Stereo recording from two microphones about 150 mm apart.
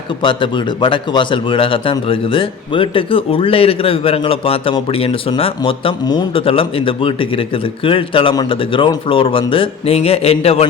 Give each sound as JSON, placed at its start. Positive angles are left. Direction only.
{"t": 0.2, "sound": "a man's voice", "side_deg": 30}